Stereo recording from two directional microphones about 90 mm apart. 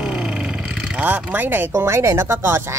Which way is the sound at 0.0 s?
10° right (ahead or behind).